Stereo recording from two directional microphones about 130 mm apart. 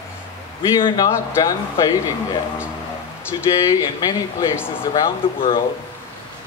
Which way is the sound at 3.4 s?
25° left (ahead or behind).